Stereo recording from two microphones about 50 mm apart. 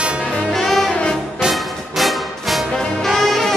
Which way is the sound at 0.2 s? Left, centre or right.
Left.